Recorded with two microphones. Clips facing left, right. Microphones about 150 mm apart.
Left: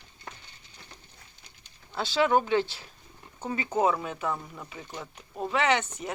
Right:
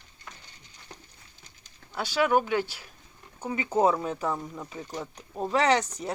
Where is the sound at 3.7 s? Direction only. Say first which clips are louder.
Right 2 dB; 35° right (ahead or behind).